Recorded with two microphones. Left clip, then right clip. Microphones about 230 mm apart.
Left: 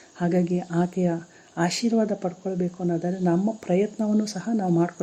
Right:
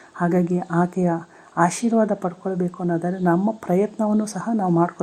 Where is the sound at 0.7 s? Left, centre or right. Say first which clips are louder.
Right 4 dB; right.